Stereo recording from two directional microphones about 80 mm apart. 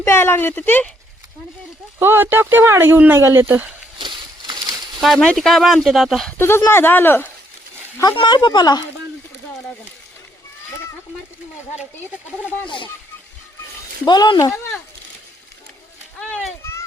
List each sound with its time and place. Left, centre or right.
0.0 s speech: left
2.0 s speech: right
3.9 s a sound: right
4.9 s speech: centre
6.3 s speech: left
8.0 s a woman's voice: left
12.6 s speech: left
14.0 s a woman's voice: left